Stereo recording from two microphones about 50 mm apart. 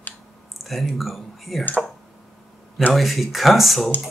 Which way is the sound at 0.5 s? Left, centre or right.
Centre.